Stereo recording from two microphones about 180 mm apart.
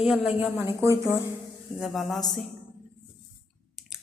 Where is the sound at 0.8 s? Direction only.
15° right (ahead or behind).